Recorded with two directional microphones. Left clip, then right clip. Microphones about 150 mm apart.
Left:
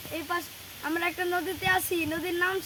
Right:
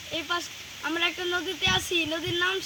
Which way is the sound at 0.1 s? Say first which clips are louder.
Right 2 dB; 10° left (ahead or behind).